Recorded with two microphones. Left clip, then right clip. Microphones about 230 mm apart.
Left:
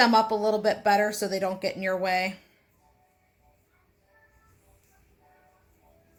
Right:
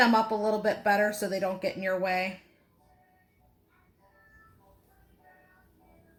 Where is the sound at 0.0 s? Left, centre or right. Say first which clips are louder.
Left 3 dB; centre.